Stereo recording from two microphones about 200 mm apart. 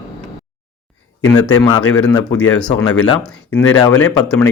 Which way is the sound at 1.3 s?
20° left (ahead or behind).